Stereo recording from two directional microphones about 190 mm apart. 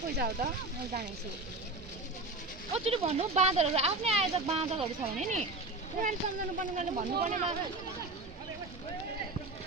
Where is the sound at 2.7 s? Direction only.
35° right (ahead or behind).